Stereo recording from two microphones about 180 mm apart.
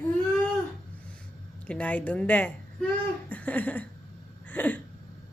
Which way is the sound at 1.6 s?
10° left (ahead or behind).